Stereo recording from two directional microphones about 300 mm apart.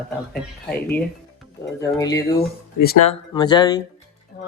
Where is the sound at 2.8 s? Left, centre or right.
Left.